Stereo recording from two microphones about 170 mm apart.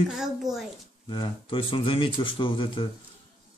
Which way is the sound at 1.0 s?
30° left (ahead or behind).